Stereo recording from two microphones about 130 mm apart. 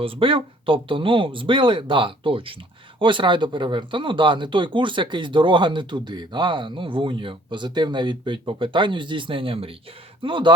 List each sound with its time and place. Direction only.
0.0 s speech: 45° right (ahead or behind)